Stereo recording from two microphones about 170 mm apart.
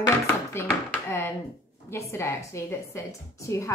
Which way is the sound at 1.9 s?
15° left (ahead or behind).